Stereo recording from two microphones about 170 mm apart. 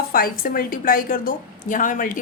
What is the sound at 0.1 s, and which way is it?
Speech, 60° left (ahead or behind).